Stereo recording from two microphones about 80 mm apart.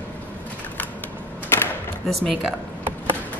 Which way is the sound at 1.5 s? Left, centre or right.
Left.